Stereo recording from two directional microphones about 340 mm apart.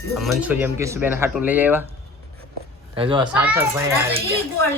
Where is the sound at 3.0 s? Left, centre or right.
Centre.